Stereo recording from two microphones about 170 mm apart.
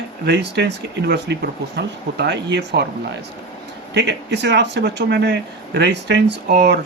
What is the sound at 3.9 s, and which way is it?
Speech, 90° right.